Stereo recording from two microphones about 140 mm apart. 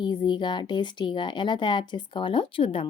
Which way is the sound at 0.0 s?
35° left (ahead or behind).